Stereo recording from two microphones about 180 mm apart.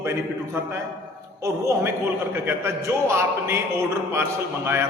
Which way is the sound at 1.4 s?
15° right (ahead or behind).